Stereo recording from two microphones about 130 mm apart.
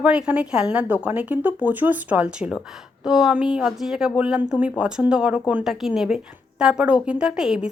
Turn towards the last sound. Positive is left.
turn(degrees=-5)  # may be behind; listen again after turning